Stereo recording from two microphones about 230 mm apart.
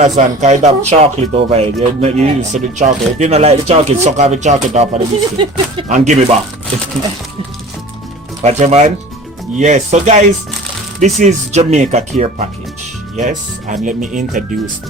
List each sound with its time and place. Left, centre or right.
0.0 s speech: right
8.4 s speech: right